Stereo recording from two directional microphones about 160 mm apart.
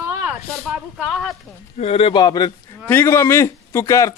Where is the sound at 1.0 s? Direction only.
5° left (ahead or behind).